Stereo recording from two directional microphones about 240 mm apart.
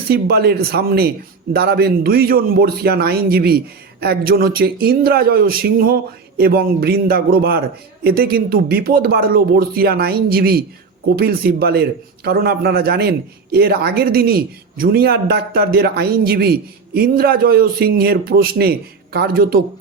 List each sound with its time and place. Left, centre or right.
0.1 s a man's voice: right